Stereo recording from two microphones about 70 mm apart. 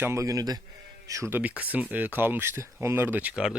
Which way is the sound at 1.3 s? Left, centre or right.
Right.